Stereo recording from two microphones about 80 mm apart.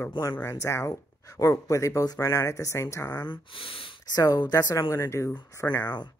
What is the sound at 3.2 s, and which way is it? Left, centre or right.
Speech, left.